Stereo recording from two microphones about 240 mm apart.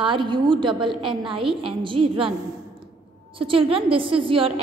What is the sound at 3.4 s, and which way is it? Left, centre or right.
A woman's voice, right.